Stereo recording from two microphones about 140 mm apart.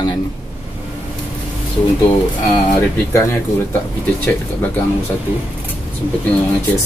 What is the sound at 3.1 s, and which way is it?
Speech, 20° left (ahead or behind).